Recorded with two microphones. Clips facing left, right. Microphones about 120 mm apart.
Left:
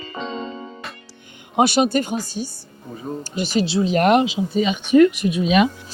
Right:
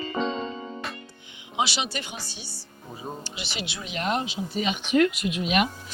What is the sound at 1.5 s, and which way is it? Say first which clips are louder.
Speech: left 11 dB; 50° left (ahead or behind).